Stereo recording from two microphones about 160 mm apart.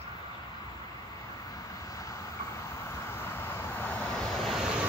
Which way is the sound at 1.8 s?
20° left (ahead or behind).